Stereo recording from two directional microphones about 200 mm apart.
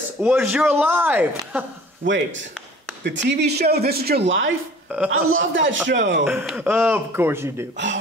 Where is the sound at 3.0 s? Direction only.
60° right (ahead or behind).